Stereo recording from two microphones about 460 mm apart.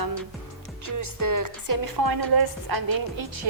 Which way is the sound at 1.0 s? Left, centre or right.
Right.